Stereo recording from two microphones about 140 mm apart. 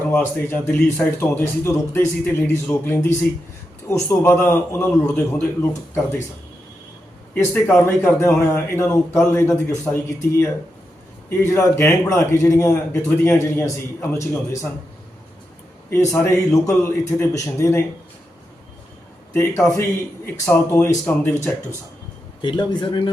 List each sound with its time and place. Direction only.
0.1 s speech: 15° left (ahead or behind)
7.5 s a man's voice: 15° left (ahead or behind)
15.9 s a man's voice: 20° left (ahead or behind)
19.3 s a man's voice: 20° left (ahead or behind)
22.4 s speech: 35° left (ahead or behind)